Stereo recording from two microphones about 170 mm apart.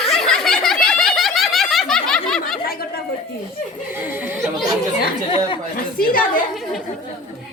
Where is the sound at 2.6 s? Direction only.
60° left (ahead or behind).